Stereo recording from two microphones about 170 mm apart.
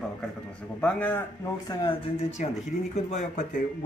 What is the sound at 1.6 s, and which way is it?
Speech, 25° left (ahead or behind).